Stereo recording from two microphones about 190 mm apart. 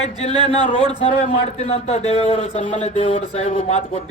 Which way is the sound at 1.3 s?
35° left (ahead or behind).